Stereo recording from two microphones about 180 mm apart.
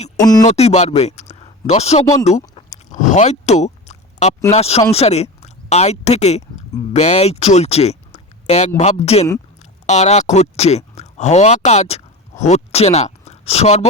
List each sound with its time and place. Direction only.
0.2 s speech: 20° left (ahead or behind)
0.4 s speech: 35° left (ahead or behind)
1.3 s a sound: 35° left (ahead or behind)
4.5 s speech: 35° left (ahead or behind)